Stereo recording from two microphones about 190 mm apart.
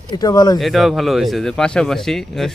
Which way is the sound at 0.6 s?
Centre (ahead or behind).